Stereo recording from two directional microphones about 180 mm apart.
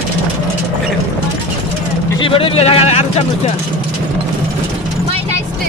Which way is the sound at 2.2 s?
30° left (ahead or behind).